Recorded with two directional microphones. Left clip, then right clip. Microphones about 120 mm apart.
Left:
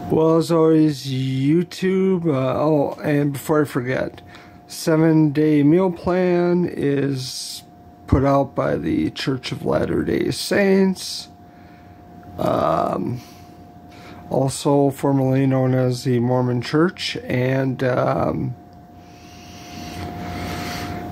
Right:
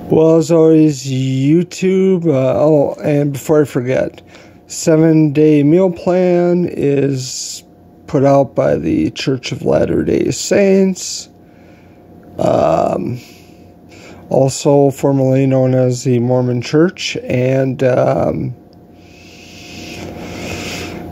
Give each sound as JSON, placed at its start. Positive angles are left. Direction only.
{"t": 0.1, "sound": "speech", "side_deg": -20}
{"t": 12.4, "sound": "speech", "side_deg": -25}
{"t": 14.0, "sound": "speech", "side_deg": -20}
{"t": 19.5, "sound": "vehicle", "side_deg": -5}
{"t": 20.0, "sound": "vehicle", "side_deg": -25}